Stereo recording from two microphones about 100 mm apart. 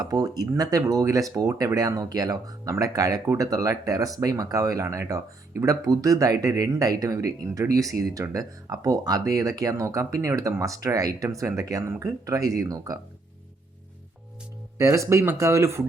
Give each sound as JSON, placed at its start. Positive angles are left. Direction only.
{"t": 0.0, "sound": "speech", "side_deg": -40}
{"t": 14.8, "sound": "speech", "side_deg": -30}